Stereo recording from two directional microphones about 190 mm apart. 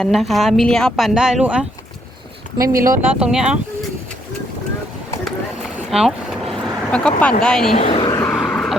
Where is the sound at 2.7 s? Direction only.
45° right (ahead or behind).